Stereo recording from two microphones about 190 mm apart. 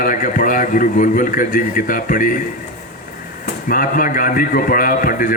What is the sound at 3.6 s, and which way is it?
A man's voice, 45° left (ahead or behind).